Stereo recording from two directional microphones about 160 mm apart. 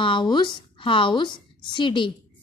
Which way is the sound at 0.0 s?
30° left (ahead or behind).